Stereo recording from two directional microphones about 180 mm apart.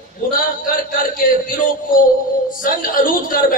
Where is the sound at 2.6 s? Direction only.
50° left (ahead or behind).